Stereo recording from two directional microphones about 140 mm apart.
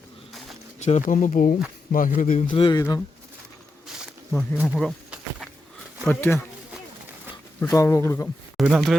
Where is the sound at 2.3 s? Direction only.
50° left (ahead or behind).